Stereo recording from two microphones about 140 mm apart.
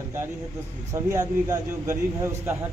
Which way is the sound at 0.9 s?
25° right (ahead or behind).